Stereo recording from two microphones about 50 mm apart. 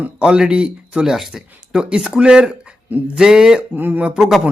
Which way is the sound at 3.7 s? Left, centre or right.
Right.